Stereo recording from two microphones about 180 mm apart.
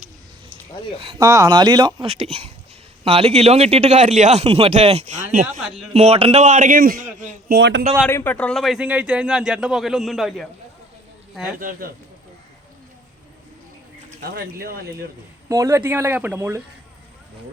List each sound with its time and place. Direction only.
1.2 s a man's voice: 20° right (ahead or behind); by 7.5 s 45° right (ahead or behind)
7.5 s speech: 65° right (ahead or behind)
8.1 s a man's voice: 10° left (ahead or behind)
14.2 s speech: 55° right (ahead or behind)
15.4 s speech: 15° right (ahead or behind)